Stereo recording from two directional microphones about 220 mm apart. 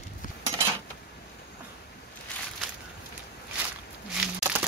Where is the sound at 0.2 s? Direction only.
40° left (ahead or behind).